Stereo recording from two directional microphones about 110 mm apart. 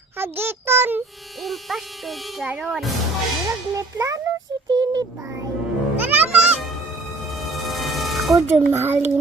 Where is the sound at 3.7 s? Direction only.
30° right (ahead or behind).